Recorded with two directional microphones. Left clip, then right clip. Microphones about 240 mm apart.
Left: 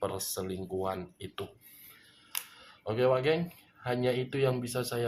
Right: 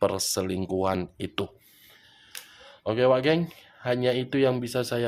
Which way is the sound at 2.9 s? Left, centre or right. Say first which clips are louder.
Right 5 dB; right.